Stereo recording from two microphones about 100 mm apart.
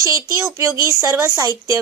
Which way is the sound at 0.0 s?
30° right (ahead or behind).